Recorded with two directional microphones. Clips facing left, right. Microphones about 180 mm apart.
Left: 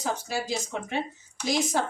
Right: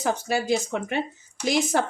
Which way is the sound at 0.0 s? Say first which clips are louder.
Right 5 dB; 60° right (ahead or behind).